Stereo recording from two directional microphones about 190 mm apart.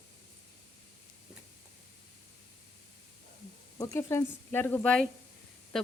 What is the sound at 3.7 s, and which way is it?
Speech, 15° left (ahead or behind).